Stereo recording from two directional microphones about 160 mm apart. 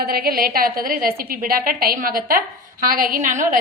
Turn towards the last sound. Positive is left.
turn(degrees=-55)  # may be behind; listen again after turning